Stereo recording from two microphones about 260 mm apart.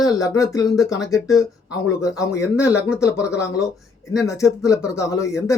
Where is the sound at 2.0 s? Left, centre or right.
Centre.